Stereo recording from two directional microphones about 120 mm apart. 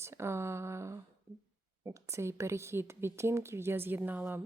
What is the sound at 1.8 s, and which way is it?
A woman's voice, 25° right (ahead or behind).